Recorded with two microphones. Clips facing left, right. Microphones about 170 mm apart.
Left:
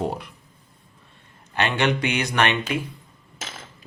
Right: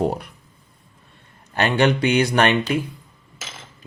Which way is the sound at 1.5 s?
35° right (ahead or behind).